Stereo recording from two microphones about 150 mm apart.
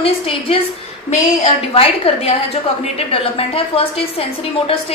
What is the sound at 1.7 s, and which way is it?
A woman's voice, 40° left (ahead or behind).